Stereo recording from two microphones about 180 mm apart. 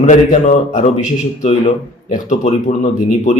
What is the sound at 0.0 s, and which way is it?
Speech, 40° left (ahead or behind).